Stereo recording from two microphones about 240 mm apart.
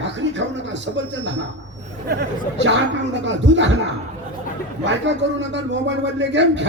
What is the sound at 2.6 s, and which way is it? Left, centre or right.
Speech, right.